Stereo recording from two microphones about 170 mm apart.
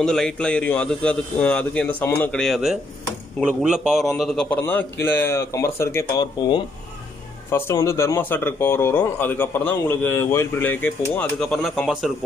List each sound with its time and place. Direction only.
0.0 s a man's voice: 5° left (ahead or behind)
7.5 s a man's voice: 15° left (ahead or behind)